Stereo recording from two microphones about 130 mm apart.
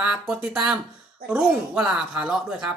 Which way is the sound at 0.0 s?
10° right (ahead or behind).